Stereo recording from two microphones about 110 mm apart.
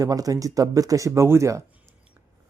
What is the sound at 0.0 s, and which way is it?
Speech, 35° right (ahead or behind).